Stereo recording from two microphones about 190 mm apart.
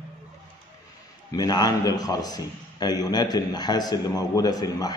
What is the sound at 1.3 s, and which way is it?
A man's voice, 20° left (ahead or behind).